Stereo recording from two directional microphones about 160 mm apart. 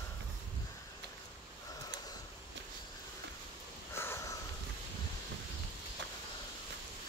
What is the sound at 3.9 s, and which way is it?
Sniff, 15° left (ahead or behind).